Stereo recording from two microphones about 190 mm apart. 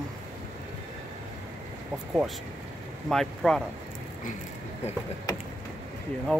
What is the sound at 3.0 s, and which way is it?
Speech, centre (ahead or behind).